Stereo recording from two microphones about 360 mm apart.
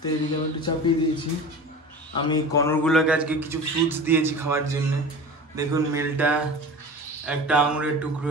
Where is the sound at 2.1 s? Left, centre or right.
Centre.